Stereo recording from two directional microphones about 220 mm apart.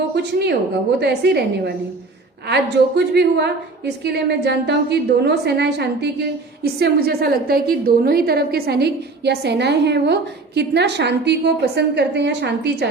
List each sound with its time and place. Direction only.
0.2 s a woman's voice: 50° right (ahead or behind)